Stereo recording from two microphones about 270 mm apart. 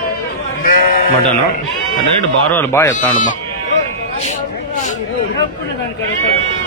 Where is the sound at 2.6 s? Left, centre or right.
Centre.